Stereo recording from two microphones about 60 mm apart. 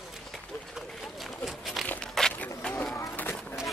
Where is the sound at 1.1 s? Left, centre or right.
Centre.